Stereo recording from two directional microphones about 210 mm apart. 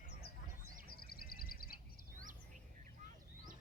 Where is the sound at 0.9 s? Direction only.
45° left (ahead or behind).